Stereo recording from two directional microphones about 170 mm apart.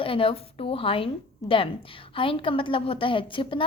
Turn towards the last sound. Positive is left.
turn(degrees=30)  # may be behind; listen again after turning